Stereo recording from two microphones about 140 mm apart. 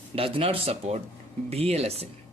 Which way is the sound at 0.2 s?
40° right (ahead or behind).